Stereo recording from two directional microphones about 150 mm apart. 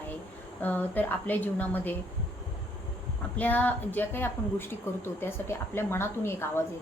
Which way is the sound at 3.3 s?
10° left (ahead or behind).